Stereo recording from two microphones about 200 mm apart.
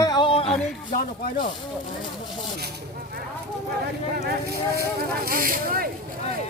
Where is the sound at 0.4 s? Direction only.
5° left (ahead or behind).